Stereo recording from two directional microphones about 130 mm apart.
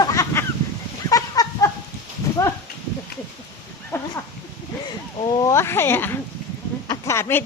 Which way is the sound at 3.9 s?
20° left (ahead or behind).